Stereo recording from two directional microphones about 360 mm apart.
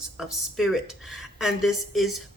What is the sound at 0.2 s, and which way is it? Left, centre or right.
Speech, centre.